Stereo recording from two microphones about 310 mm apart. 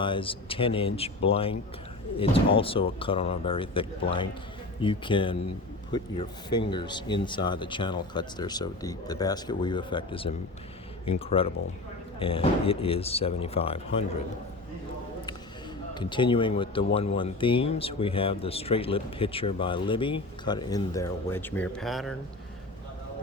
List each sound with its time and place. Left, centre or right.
0.0 s speech: centre
16.0 s speech: centre